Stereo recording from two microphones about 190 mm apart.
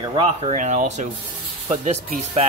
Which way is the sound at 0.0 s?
25° right (ahead or behind).